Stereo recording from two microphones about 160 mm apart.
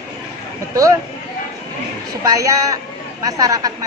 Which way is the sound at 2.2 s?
20° right (ahead or behind).